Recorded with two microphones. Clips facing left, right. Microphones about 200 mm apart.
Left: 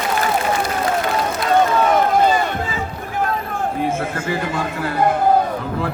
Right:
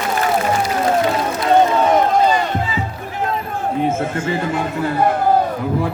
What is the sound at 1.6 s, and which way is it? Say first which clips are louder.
Run: right 1 dB; 20° right (ahead or behind).